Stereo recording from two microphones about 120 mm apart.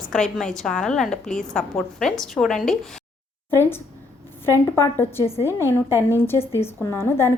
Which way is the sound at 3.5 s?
20° left (ahead or behind).